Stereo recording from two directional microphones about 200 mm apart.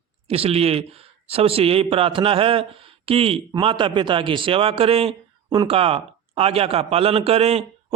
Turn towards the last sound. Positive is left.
turn(degrees=-30)  # may be behind; listen again after turning